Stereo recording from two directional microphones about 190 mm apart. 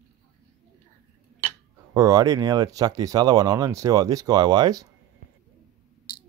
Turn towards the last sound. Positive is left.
turn(degrees=-20)  # may be behind; listen again after turning